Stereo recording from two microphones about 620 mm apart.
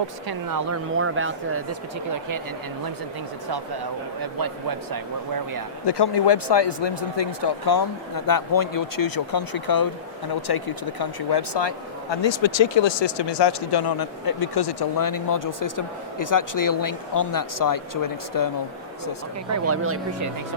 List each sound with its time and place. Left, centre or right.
0.3 s speech: right
5.8 s speech: left
19.5 s speech: right